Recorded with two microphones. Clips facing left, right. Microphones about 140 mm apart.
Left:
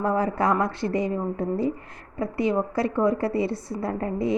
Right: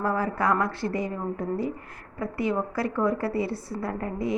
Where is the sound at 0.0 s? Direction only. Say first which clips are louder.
Left 3 dB; 20° left (ahead or behind).